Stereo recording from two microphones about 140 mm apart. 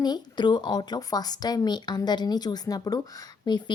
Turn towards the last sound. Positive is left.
turn(degrees=30)  # may be behind; listen again after turning